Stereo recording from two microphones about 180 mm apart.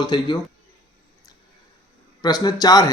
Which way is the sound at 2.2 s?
20° left (ahead or behind).